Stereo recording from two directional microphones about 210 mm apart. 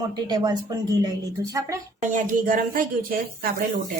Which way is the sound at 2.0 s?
35° right (ahead or behind).